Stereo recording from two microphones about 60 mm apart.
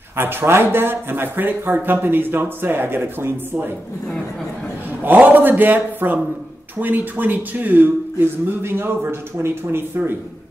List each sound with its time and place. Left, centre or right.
0.1 s speech: right
5.0 s speech: right